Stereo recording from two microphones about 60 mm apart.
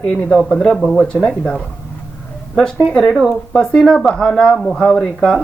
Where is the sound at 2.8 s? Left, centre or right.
Centre.